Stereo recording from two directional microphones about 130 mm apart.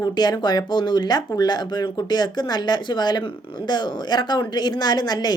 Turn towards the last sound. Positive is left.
turn(degrees=30)  # may be behind; listen again after turning